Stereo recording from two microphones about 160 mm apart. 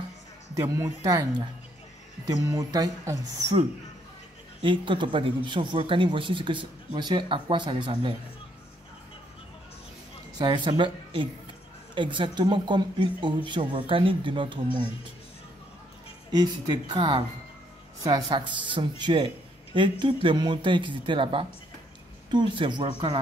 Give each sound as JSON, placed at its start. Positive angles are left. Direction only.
{"t": 0.6, "sound": "speech", "side_deg": -20}
{"t": 4.6, "sound": "speech", "side_deg": -30}
{"t": 10.4, "sound": "speech", "side_deg": -30}
{"t": 16.3, "sound": "speech", "side_deg": -25}